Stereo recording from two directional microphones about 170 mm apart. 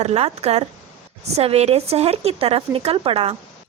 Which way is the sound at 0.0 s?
40° right (ahead or behind).